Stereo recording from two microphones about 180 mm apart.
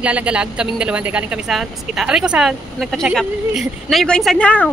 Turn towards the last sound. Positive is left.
turn(degrees=5)  # may be behind; listen again after turning